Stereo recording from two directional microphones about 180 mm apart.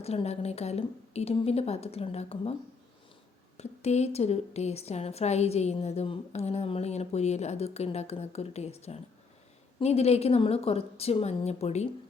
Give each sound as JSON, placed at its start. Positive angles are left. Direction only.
{"t": 0.0, "sound": "speech", "side_deg": 35}
{"t": 3.6, "sound": "speech", "side_deg": 35}